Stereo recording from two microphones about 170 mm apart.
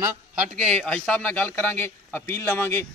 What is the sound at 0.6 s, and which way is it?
A man's voice, 5° left (ahead or behind).